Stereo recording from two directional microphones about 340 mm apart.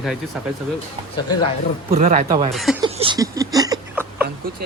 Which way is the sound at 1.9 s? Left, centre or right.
Right.